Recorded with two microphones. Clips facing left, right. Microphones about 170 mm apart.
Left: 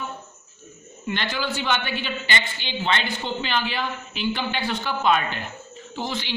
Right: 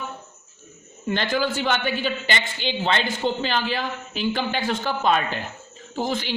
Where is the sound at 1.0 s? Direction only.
45° right (ahead or behind).